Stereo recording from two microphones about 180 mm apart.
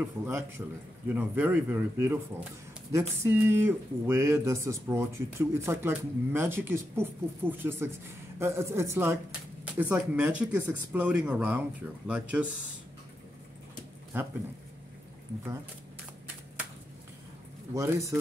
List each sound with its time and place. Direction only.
0.0 s speech: 15° right (ahead or behind)
17.7 s speech: 15° right (ahead or behind)